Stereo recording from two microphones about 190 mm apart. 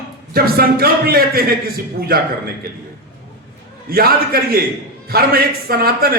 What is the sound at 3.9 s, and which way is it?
A man's voice, 55° right (ahead or behind).